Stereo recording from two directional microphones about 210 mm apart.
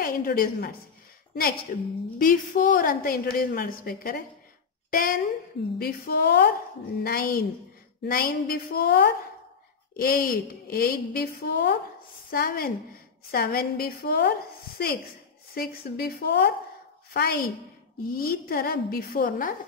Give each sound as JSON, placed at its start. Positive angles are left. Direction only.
{"t": 0.0, "sound": "a woman's voice", "side_deg": 45}
{"t": 1.7, "sound": "a woman's voice", "side_deg": 45}
{"t": 15.5, "sound": "a woman's voice", "side_deg": 45}